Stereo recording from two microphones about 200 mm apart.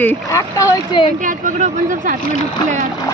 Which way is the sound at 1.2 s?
40° right (ahead or behind).